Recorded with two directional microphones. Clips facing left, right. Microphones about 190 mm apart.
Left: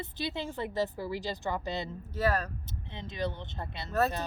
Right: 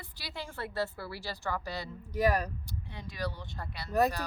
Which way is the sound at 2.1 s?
15° right (ahead or behind).